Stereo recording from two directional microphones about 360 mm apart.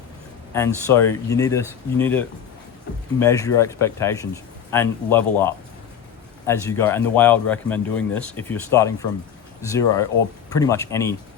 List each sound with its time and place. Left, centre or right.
0.5 s speech: centre